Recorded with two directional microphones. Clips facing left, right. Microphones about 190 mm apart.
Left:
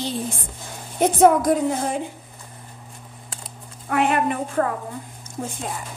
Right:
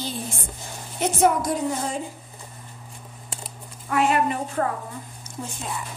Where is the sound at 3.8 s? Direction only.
55° left (ahead or behind).